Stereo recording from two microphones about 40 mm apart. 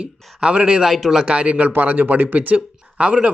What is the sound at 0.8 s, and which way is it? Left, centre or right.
Speech, centre.